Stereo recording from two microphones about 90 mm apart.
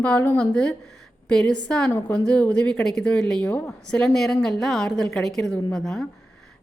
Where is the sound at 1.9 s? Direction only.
25° left (ahead or behind).